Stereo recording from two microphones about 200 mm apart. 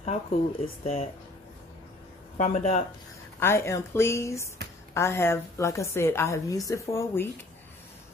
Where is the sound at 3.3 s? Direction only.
10° left (ahead or behind).